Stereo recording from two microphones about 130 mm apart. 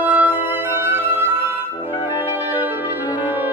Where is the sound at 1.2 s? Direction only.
15° right (ahead or behind).